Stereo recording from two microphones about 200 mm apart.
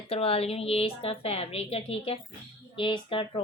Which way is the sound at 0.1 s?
30° left (ahead or behind).